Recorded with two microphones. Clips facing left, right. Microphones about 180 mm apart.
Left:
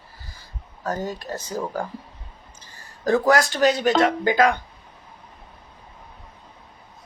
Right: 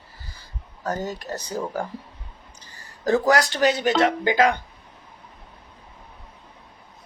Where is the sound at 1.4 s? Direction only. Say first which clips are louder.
Even; 20° right (ahead or behind).